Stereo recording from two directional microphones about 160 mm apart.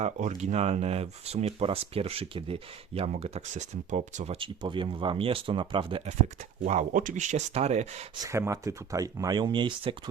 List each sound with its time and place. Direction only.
0.0 s speech: 45° right (ahead or behind)
4.4 s speech: 30° right (ahead or behind)
6.7 s speech: 50° right (ahead or behind)
8.2 s speech: 20° right (ahead or behind)